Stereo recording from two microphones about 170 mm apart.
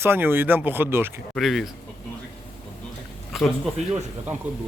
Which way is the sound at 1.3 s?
Centre (ahead or behind).